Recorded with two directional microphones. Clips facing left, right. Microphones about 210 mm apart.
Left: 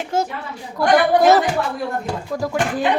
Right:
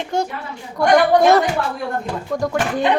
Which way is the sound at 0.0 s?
5° left (ahead or behind).